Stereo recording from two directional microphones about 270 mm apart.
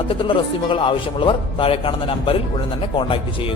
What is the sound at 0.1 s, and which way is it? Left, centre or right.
Speech, centre.